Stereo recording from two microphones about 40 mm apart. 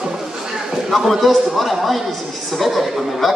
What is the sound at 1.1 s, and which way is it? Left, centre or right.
A man's voice, centre.